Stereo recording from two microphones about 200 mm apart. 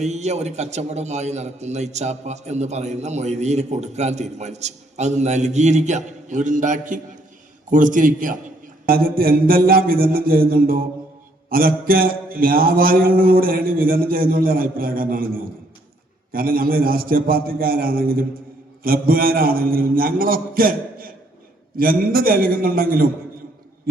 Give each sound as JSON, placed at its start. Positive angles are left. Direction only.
{"t": 0.0, "sound": "a man's voice", "side_deg": -35}
{"t": 8.9, "sound": "mantra", "side_deg": -50}
{"t": 16.3, "sound": "mantra", "side_deg": -45}